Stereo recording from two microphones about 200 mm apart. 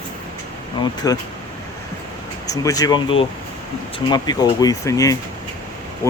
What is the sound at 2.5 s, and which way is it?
Speech, 15° left (ahead or behind).